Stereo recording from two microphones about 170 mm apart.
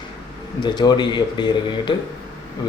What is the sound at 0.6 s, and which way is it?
A man's voice, 25° left (ahead or behind).